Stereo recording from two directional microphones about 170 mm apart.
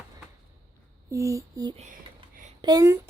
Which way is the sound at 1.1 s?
20° right (ahead or behind).